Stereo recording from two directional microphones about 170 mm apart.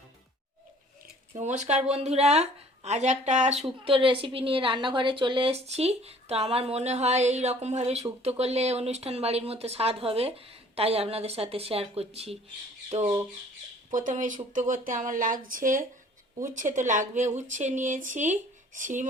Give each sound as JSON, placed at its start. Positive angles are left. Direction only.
{"t": 1.3, "sound": "a woman's voice", "side_deg": -45}